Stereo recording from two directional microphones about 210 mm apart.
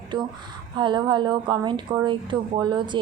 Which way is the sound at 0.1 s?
20° right (ahead or behind).